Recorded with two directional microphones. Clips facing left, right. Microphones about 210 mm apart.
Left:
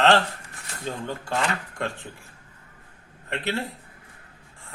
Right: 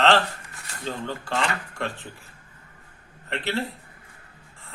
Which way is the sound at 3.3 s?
15° left (ahead or behind).